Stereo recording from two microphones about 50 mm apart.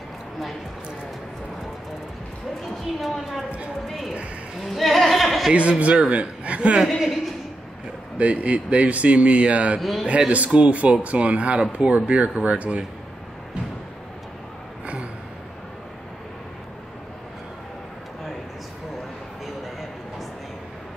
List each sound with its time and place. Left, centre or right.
3.0 s a woman's voice: centre
4.6 s a sound: centre
5.5 s speech: right
8.2 s speech: right
9.8 s a woman's voice: centre
10.0 s speech: right